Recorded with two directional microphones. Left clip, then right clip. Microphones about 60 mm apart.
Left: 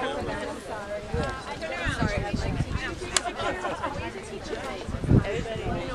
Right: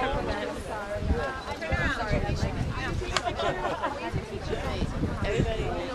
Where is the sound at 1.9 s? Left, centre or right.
Left.